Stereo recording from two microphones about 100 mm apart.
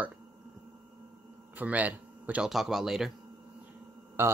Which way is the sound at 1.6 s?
15° right (ahead or behind).